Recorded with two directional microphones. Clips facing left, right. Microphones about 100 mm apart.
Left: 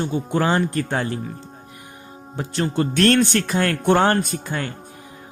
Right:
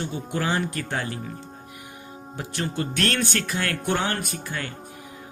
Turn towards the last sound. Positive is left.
turn(degrees=25)  # may be behind; listen again after turning